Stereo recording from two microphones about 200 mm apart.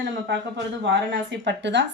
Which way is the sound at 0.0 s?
60° right (ahead or behind).